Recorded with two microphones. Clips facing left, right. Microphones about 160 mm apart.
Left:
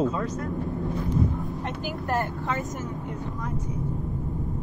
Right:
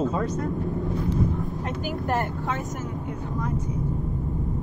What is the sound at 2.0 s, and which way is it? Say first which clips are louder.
Vehicle: right 1 dB; 20° right (ahead or behind).